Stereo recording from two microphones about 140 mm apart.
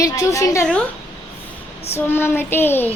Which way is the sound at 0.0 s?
25° left (ahead or behind).